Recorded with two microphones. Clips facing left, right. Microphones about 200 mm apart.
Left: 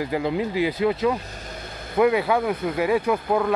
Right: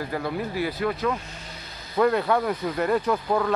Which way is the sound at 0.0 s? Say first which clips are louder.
Left 4 dB; 15° left (ahead or behind).